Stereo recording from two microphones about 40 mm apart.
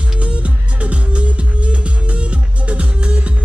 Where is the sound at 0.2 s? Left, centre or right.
Right.